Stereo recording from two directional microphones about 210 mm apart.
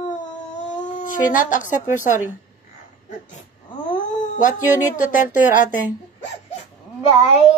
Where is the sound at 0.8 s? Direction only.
35° left (ahead or behind).